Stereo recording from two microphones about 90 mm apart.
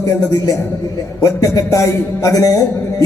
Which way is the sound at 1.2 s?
40° left (ahead or behind).